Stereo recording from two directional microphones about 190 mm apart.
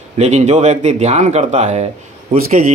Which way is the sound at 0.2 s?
35° right (ahead or behind).